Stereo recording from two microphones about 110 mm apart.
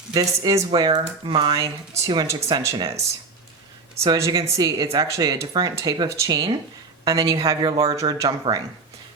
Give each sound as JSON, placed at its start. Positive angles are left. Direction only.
{"t": 0.1, "sound": "speech", "side_deg": -35}
{"t": 4.0, "sound": "a woman's voice", "side_deg": -35}